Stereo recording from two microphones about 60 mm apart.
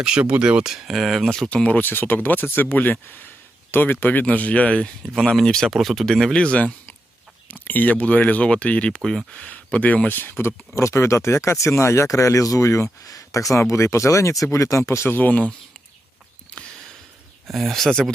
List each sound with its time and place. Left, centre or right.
0.0 s speech: centre
1.6 s speech: left
7.6 s speech: left
9.0 s speech: centre
9.3 s speech: centre; by 12.9 s left
13.1 s a sound: left
13.5 s speech: left
15.1 s speech: left
17.4 s speech: centre